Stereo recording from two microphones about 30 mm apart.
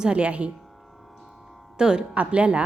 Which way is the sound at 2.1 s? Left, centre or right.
Right.